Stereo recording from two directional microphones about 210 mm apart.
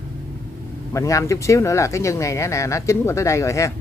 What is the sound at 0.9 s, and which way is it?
Speech, 15° left (ahead or behind).